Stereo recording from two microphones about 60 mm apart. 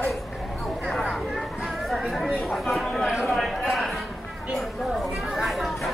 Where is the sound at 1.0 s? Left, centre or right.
Centre.